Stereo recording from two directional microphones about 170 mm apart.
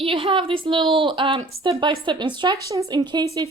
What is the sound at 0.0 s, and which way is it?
A woman's voice, 30° right (ahead or behind).